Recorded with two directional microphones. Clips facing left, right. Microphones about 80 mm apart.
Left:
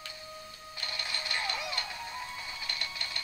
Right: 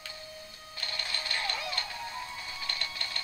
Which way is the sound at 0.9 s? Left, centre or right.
Centre.